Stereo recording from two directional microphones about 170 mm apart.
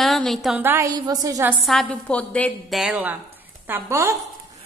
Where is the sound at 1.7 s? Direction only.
5° left (ahead or behind).